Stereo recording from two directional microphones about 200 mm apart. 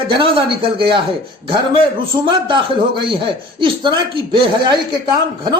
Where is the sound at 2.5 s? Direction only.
25° right (ahead or behind).